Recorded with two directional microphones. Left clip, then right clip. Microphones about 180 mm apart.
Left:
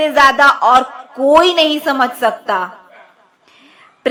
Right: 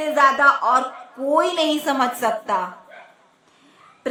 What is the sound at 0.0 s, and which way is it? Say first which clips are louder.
A woman's voice: left 6 dB; 30° left (ahead or behind).